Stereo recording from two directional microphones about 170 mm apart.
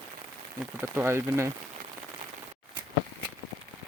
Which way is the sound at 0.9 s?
15° right (ahead or behind).